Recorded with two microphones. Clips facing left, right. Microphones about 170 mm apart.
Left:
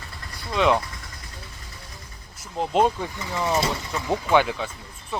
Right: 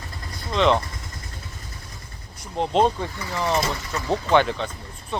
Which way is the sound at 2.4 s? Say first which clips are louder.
Right 1 dB; 5° left (ahead or behind).